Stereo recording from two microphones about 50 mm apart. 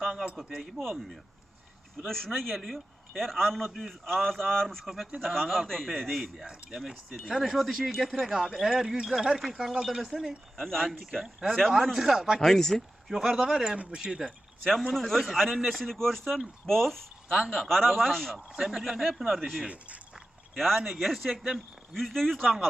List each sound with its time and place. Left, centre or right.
0.0 s speech: centre
5.9 s speech: centre
10.6 s speech: centre
11.2 s speech: centre
12.4 s speech: centre
13.1 s speech: centre
14.6 s speech: centre
18.5 s speech: centre
19.6 s speech: right
20.6 s speech: centre
22.0 s speech: centre